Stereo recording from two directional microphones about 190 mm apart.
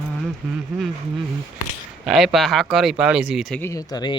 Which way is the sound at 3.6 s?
15° left (ahead or behind).